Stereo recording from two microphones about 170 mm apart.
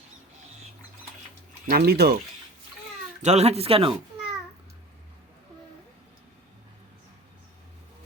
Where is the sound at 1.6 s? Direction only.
65° right (ahead or behind).